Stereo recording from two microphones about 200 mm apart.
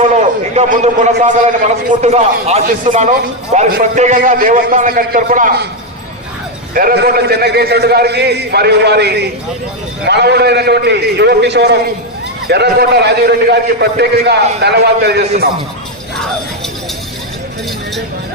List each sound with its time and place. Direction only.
0.0 s a man's voice: 35° right (ahead or behind)
6.7 s a man's voice: 50° right (ahead or behind)